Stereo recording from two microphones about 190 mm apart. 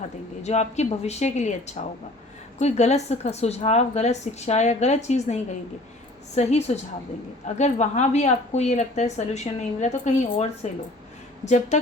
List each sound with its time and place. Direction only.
0.4 s a woman's voice: 35° left (ahead or behind)